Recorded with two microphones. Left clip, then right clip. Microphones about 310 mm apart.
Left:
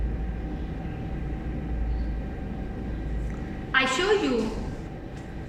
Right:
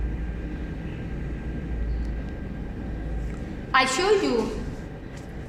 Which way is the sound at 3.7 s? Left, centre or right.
Centre.